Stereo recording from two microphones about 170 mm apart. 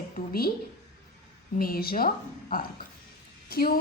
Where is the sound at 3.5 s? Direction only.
60° left (ahead or behind).